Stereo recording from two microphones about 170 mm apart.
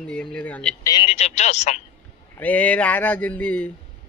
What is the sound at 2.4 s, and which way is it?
A man's voice, 10° left (ahead or behind).